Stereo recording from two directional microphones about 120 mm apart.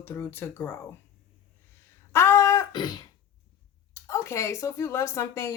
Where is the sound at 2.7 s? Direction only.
35° left (ahead or behind).